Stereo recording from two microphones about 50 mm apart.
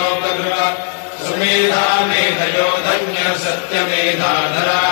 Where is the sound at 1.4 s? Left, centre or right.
Right.